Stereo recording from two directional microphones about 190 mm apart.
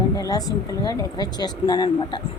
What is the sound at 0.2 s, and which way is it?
Speech, 20° left (ahead or behind).